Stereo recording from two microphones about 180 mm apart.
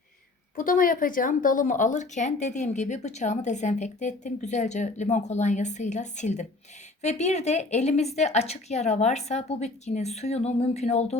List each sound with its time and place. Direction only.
0.5 s a woman's voice: 50° left (ahead or behind)